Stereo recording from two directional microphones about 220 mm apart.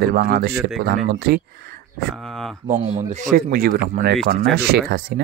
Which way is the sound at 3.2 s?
40° right (ahead or behind).